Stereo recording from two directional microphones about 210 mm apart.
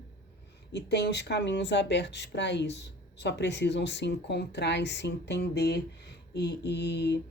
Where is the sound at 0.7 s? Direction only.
55° left (ahead or behind).